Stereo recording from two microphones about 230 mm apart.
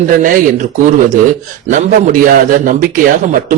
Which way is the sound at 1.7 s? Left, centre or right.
Right.